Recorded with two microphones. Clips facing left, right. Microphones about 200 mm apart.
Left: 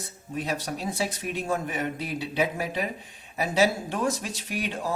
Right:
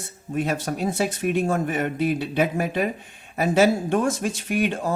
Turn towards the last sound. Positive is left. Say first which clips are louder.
# right 7 dB
turn(degrees=-50)  # may be behind; listen again after turning